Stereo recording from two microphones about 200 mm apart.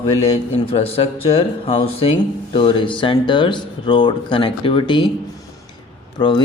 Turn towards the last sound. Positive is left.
turn(degrees=25)  # may be behind; listen again after turning